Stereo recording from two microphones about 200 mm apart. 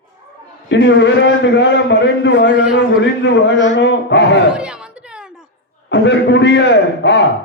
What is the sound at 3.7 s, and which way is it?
Speech, 60° left (ahead or behind).